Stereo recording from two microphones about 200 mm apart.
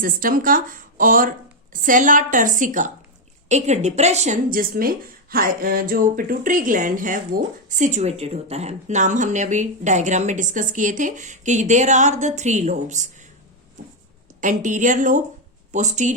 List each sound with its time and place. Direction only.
0.0 s speech: 45° right (ahead or behind)
14.4 s speech: 40° right (ahead or behind)